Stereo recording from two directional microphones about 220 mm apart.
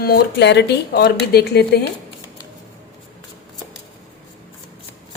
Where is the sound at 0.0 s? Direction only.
45° left (ahead or behind).